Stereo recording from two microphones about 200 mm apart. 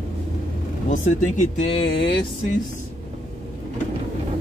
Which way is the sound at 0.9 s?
35° left (ahead or behind).